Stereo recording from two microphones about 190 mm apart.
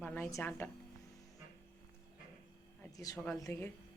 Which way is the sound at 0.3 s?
10° left (ahead or behind).